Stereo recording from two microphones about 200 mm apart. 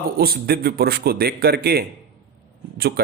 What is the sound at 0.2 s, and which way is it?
Speech, 50° right (ahead or behind).